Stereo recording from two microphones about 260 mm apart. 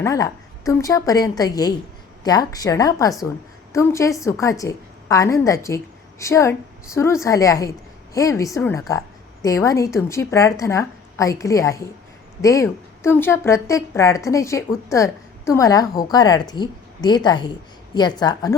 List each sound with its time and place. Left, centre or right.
0.0 s a woman's voice: centre